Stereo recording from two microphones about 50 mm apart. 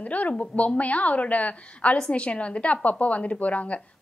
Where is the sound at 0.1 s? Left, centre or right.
Left.